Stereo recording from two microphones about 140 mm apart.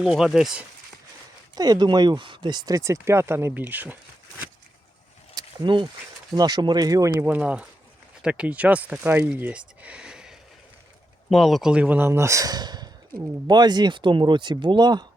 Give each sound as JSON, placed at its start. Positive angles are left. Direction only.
{"t": 0.0, "sound": "speech", "side_deg": 0}
{"t": 1.5, "sound": "speech", "side_deg": -30}
{"t": 5.3, "sound": "a sound", "side_deg": -25}
{"t": 6.3, "sound": "speech", "side_deg": -30}